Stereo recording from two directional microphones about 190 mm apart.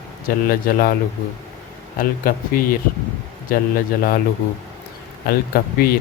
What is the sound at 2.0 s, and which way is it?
Speech, 50° left (ahead or behind).